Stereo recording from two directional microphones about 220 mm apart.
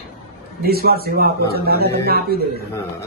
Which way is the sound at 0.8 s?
45° right (ahead or behind).